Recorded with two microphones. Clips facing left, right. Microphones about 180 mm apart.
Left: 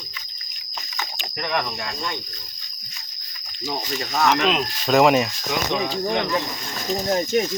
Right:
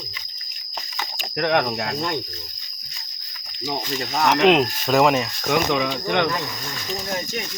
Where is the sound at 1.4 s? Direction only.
75° right (ahead or behind).